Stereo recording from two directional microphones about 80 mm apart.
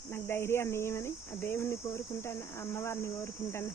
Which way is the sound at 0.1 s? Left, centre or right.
Left.